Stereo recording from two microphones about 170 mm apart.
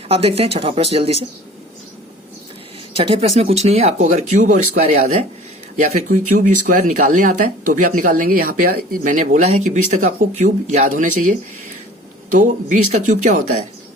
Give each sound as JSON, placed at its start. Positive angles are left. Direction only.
{"t": 0.1, "sound": "speech", "side_deg": -35}
{"t": 3.0, "sound": "speech", "side_deg": -35}
{"t": 12.4, "sound": "speech", "side_deg": -50}